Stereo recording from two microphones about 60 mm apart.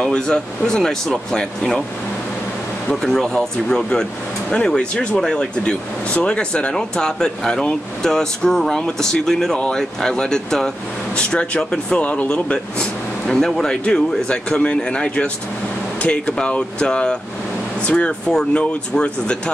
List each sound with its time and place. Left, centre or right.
0.0 s speech: centre
2.9 s speech: centre
11.1 s speech: left
13.3 s speech: centre